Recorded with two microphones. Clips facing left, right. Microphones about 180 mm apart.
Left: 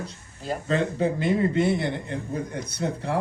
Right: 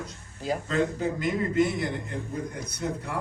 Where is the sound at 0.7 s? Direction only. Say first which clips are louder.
Left 4 dB; 30° left (ahead or behind).